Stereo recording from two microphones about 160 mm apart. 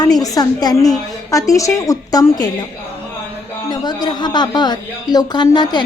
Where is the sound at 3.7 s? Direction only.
25° left (ahead or behind).